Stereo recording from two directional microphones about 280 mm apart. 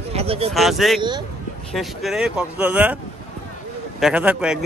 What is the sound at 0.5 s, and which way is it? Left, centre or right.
A man's voice, centre.